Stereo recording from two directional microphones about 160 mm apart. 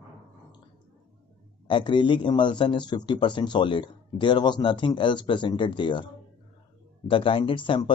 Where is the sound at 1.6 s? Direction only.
30° left (ahead or behind).